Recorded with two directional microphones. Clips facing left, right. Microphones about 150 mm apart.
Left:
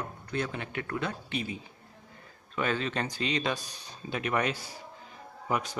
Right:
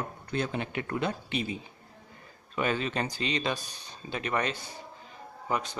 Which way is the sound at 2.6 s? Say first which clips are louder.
Right 1 dB; 5° right (ahead or behind).